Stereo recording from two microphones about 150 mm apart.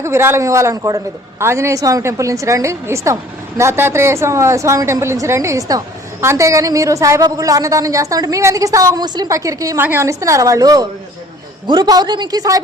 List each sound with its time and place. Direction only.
0.0 s a woman's voice: 15° right (ahead or behind)